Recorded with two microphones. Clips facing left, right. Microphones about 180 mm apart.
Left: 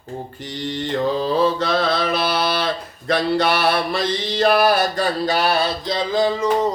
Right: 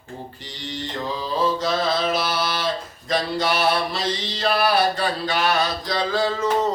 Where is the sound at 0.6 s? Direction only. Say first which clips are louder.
Left 8 dB; 60° left (ahead or behind).